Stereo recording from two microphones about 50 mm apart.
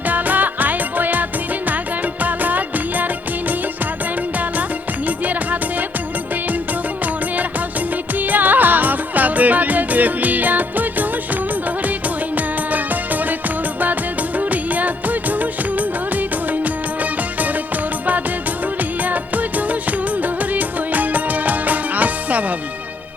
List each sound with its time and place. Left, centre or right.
0.1 s music: right
5.0 s music: right
8.2 s music: right
12.7 s music: right
14.3 s music of bollywood: right
19.0 s music: right